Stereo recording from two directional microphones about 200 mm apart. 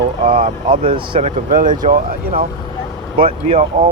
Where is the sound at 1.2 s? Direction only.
40° right (ahead or behind).